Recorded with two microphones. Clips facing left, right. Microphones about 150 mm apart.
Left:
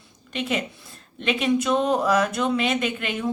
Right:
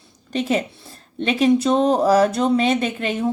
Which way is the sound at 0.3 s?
35° right (ahead or behind).